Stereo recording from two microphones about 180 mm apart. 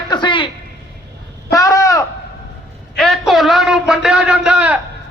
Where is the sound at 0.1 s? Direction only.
25° left (ahead or behind).